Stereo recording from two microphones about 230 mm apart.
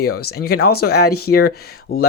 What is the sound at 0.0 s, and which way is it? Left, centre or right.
Speech, left.